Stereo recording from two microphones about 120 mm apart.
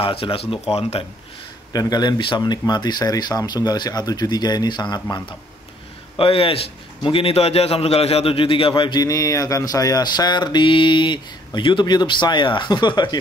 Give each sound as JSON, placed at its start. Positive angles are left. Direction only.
{"t": 0.0, "sound": "speech", "side_deg": 50}
{"t": 1.7, "sound": "a man's voice", "side_deg": 35}
{"t": 6.1, "sound": "a man's voice", "side_deg": 50}